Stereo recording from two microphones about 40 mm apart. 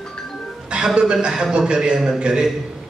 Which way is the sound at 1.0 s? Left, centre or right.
Right.